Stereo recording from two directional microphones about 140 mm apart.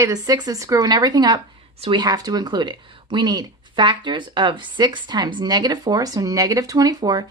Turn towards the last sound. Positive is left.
turn(degrees=-30)  # may be behind; listen again after turning